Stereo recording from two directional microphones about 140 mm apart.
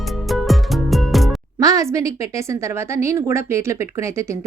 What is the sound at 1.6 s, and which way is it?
A woman's voice, 25° right (ahead or behind).